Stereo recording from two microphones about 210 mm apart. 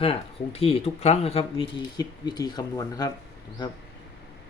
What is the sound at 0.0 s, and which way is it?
Speech, 25° left (ahead or behind).